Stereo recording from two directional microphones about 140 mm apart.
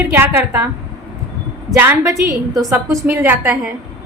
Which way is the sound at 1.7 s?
15° right (ahead or behind).